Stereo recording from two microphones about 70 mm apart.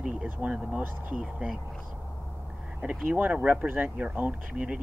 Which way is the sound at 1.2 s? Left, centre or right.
Centre.